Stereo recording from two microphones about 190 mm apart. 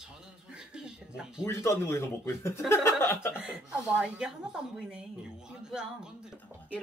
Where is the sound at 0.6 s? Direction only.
5° right (ahead or behind).